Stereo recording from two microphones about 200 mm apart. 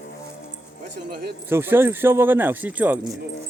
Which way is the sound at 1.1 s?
55° right (ahead or behind).